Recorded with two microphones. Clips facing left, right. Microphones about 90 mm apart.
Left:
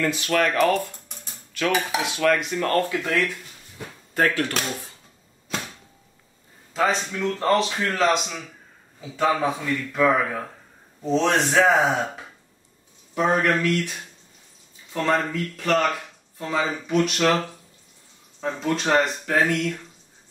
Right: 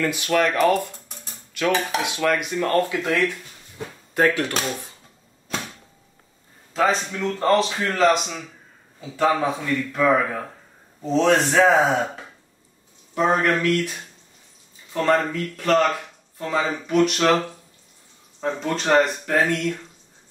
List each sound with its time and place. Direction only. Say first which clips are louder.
0.0 s speech: right 1 dB; 10° right (ahead or behind)
1.0 s typewriter: right 1 dB; centre (ahead or behind)
1.7 s cutlery: right 2 dB; 10° left (ahead or behind)
2.0 s speech: left 1 dB; 15° right (ahead or behind)
6.7 s speech: right 2 dB; centre (ahead or behind)